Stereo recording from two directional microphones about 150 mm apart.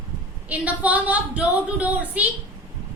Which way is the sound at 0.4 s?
10° right (ahead or behind).